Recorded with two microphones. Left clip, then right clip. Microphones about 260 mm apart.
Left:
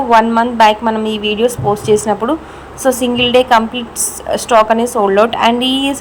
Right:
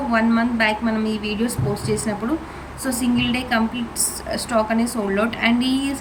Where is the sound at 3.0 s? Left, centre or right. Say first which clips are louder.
Left 11 dB; centre.